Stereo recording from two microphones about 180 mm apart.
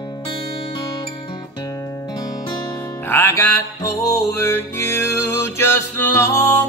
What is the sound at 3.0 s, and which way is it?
Music, 15° left (ahead or behind).